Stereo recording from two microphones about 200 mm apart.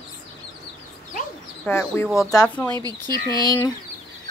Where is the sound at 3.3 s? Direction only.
20° left (ahead or behind).